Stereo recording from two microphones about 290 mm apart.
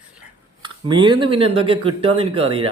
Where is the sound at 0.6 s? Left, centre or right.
Centre.